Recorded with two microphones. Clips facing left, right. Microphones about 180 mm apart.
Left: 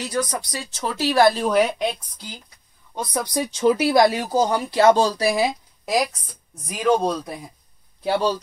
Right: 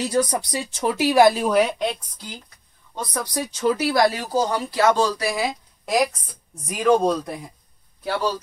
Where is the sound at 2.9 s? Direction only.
15° left (ahead or behind).